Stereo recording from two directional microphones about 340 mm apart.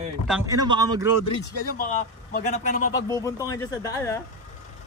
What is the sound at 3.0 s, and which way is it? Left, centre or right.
Speech, centre.